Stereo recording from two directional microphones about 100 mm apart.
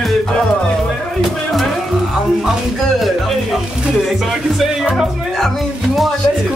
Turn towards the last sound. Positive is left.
turn(degrees=0)  # may be behind; listen again after turning